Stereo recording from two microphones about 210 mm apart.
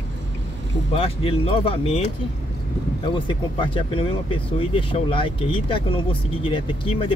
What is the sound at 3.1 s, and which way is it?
Speech, 25° left (ahead or behind).